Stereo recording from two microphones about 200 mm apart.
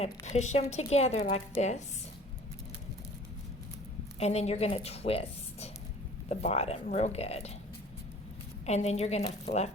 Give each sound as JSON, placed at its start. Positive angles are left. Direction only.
{"t": 0.0, "sound": "a woman's voice", "side_deg": 35}
{"t": 4.2, "sound": "a woman's voice", "side_deg": 30}
{"t": 8.6, "sound": "a woman's voice", "side_deg": 35}